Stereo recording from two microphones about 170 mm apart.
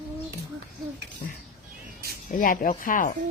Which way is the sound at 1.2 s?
50° left (ahead or behind).